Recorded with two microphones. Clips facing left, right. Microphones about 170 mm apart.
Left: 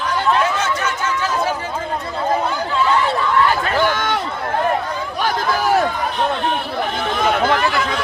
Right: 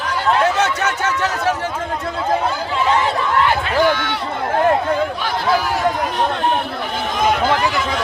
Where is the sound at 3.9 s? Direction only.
45° left (ahead or behind).